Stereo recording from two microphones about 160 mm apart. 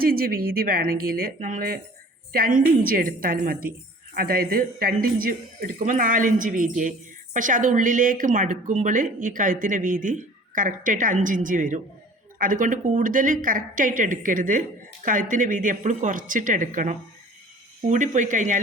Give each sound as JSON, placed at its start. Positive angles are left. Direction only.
{"t": 0.0, "sound": "a woman's voice", "side_deg": -65}